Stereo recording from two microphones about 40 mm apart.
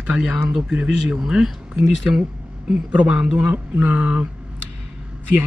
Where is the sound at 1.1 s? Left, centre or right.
Centre; by 3.2 s right.